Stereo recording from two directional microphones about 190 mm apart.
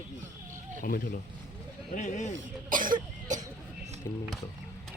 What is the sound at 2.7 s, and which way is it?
Speech, 45° right (ahead or behind).